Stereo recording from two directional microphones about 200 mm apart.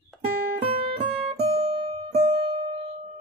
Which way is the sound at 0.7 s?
30° right (ahead or behind).